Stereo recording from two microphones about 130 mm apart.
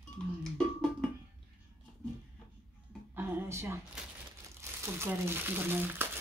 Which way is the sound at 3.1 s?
20° right (ahead or behind).